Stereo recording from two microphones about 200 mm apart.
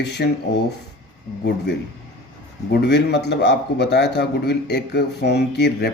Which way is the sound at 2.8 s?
55° left (ahead or behind).